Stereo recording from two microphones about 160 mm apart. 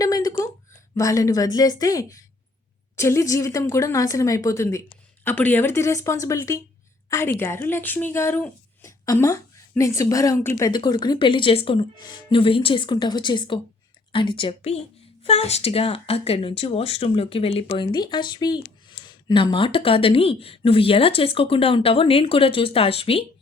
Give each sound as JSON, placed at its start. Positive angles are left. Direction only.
{"t": 0.0, "sound": "a sound", "side_deg": 25}
{"t": 2.9, "sound": "a woman's voice", "side_deg": 15}
{"t": 10.7, "sound": "speech", "side_deg": 25}